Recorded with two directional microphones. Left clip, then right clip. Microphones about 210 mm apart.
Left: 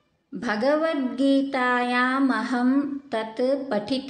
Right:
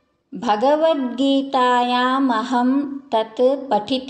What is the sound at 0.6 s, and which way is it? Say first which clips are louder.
A woman's voice: right 5 dB; 10° right (ahead or behind).